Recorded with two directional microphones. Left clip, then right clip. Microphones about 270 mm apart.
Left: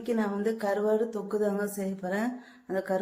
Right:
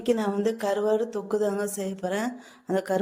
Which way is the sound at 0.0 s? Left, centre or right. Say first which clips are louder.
Right 5 dB; right.